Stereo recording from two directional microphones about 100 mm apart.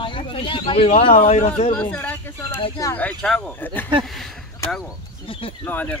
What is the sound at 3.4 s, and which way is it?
Speech, 20° left (ahead or behind).